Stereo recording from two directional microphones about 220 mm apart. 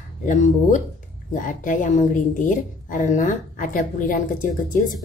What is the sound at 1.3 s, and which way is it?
Speech, 35° left (ahead or behind).